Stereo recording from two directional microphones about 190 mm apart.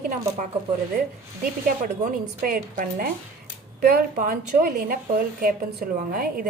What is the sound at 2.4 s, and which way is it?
A woman's voice, 50° right (ahead or behind).